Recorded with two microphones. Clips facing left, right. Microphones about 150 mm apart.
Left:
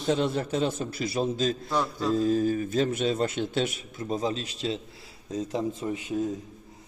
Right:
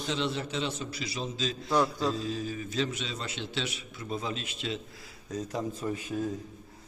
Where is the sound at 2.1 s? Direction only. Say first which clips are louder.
Left 10 dB; 50° left (ahead or behind).